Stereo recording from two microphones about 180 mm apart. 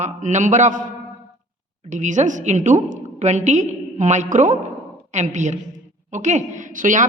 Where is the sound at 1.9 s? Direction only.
40° right (ahead or behind).